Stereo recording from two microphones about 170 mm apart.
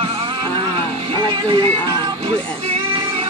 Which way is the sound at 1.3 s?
30° right (ahead or behind).